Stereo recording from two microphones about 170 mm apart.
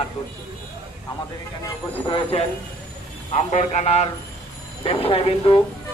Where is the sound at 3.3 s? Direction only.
40° left (ahead or behind).